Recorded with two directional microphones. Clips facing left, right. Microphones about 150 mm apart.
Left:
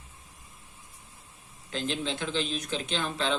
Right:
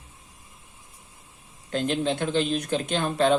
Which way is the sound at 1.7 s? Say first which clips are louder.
Right 7 dB; 55° right (ahead or behind).